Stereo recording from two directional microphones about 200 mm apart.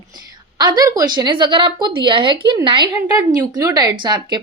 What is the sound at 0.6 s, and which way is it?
A woman's voice, 20° right (ahead or behind).